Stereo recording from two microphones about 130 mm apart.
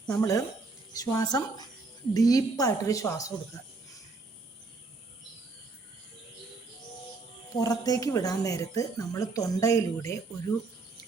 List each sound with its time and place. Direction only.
0.1 s speech: 25° left (ahead or behind)
7.6 s speech: 30° left (ahead or behind)